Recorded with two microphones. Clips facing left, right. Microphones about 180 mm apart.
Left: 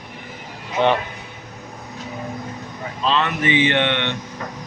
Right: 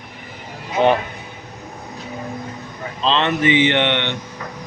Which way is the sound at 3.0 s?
25° right (ahead or behind).